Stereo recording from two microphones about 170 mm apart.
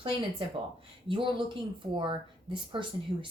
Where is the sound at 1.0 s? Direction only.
30° right (ahead or behind).